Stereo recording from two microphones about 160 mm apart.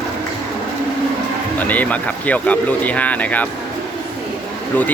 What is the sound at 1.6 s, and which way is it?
Speech, 10° left (ahead or behind).